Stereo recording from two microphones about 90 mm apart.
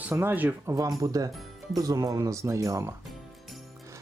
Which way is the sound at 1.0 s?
40° right (ahead or behind).